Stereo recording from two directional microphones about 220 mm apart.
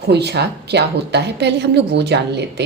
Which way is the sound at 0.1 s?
50° right (ahead or behind).